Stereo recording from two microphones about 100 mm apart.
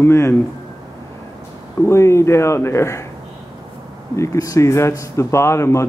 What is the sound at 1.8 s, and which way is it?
Speech, 30° left (ahead or behind).